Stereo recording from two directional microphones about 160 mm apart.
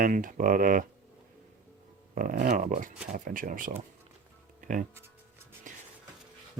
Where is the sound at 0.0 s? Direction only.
55° right (ahead or behind).